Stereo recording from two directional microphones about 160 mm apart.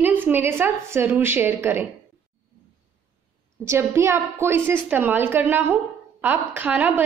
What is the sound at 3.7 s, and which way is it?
A woman's voice, 15° right (ahead or behind).